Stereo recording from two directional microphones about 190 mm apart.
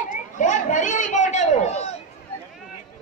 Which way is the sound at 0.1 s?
40° left (ahead or behind).